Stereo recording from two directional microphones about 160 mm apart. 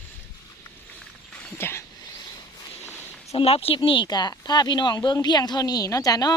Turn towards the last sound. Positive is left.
turn(degrees=25)  # may be behind; listen again after turning